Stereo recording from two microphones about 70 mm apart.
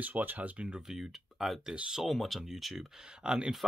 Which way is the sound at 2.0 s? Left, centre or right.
Centre.